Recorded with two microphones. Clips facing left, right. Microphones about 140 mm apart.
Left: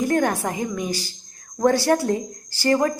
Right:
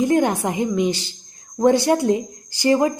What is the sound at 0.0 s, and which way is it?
A woman's voice, 20° right (ahead or behind).